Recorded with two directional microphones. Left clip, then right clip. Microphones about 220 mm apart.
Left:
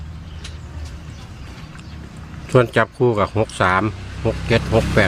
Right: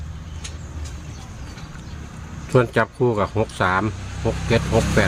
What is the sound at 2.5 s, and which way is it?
Speech, 15° left (ahead or behind).